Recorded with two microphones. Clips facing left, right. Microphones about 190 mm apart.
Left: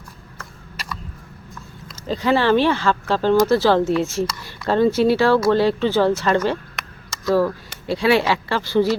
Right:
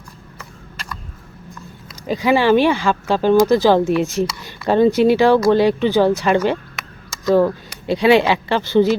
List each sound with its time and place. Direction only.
1.9 s speech: 10° right (ahead or behind)
6.8 s a sound: centre (ahead or behind)
7.3 s speech: 20° right (ahead or behind)